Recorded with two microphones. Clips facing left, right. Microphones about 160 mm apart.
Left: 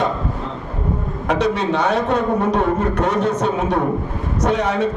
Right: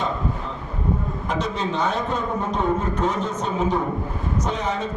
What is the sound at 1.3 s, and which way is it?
A man's voice, 75° left (ahead or behind).